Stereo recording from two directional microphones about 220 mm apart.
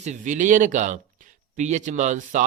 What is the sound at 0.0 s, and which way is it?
Speech, 35° right (ahead or behind).